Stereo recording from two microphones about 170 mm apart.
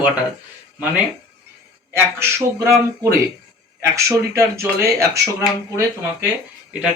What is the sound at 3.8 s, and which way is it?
Speech, 15° right (ahead or behind).